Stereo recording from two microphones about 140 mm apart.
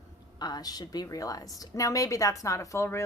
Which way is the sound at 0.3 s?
30° left (ahead or behind).